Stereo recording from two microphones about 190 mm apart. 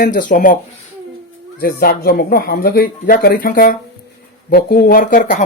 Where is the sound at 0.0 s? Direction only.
45° left (ahead or behind).